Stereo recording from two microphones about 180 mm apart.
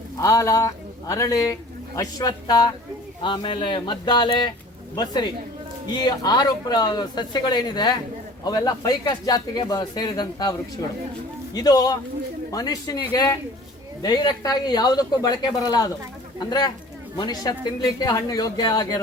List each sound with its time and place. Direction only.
0.2 s speech: 15° left (ahead or behind)
11.5 s speech: 20° left (ahead or behind)